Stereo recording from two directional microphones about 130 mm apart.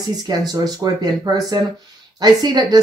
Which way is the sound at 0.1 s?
30° right (ahead or behind).